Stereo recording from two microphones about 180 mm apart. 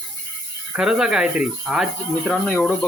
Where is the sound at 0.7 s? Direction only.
5° right (ahead or behind).